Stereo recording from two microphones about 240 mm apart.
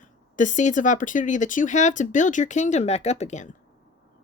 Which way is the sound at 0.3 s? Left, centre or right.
Left.